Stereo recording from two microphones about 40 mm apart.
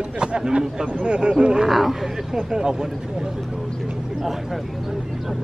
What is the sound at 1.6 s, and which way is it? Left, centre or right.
Speech, centre.